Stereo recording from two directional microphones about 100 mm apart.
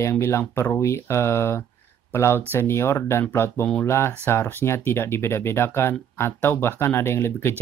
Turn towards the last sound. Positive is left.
turn(degrees=25)  # may be behind; listen again after turning